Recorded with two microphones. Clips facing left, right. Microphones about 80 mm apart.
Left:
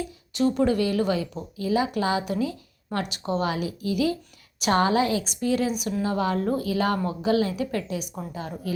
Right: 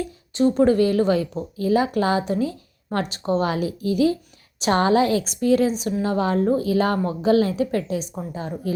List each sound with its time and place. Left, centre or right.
0.3 s speech: right